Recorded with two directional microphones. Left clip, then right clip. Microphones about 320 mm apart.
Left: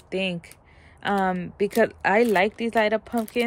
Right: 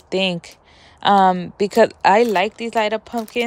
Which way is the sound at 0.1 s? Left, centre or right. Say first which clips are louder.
Right 7 dB; centre.